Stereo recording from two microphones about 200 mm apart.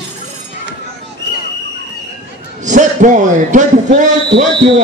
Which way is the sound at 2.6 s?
40° right (ahead or behind).